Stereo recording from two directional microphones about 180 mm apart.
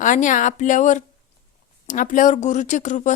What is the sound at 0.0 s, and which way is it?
Speech, 45° left (ahead or behind).